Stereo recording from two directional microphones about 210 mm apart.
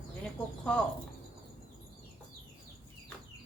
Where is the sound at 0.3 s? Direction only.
5° left (ahead or behind).